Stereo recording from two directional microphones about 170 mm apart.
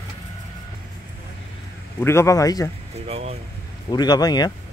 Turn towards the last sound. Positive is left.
turn(degrees=25)  # may be behind; listen again after turning